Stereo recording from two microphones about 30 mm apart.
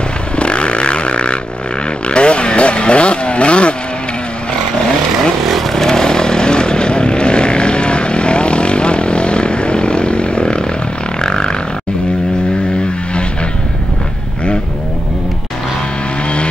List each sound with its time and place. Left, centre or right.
0.4 s vehicle: left
5.4 s vehicle: centre
5.7 s vehicle: centre
11.1 s a sound: left